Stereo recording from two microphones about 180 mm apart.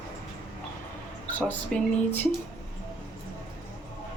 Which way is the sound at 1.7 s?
5° left (ahead or behind).